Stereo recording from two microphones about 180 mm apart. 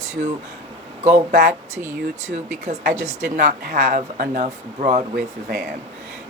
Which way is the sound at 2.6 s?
40° right (ahead or behind).